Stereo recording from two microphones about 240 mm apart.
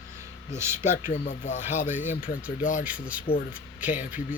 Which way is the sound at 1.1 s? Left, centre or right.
Left.